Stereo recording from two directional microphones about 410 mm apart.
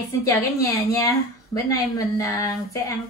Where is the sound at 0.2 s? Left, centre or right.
Centre.